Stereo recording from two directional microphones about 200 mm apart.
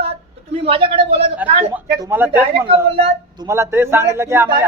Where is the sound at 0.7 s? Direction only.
25° right (ahead or behind).